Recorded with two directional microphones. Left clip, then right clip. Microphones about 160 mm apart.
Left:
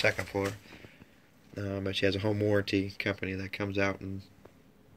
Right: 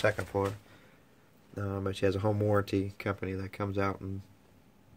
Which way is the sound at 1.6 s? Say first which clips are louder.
Left 1 dB; 25° right (ahead or behind).